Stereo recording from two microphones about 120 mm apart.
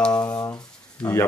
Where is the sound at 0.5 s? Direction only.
30° left (ahead or behind).